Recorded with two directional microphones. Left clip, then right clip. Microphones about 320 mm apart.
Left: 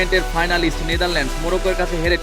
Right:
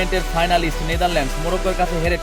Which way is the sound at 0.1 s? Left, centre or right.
Centre.